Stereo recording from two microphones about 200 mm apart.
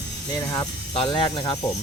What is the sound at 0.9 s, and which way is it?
Speech, 25° left (ahead or behind).